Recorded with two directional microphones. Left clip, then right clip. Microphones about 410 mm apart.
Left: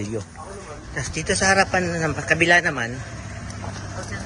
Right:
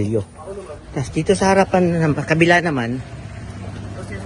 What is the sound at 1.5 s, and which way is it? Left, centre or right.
Speech, right.